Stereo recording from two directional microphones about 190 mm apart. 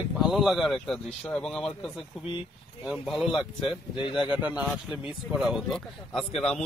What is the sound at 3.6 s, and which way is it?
Speech, 25° left (ahead or behind).